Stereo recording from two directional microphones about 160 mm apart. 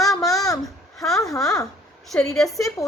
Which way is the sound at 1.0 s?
Centre (ahead or behind).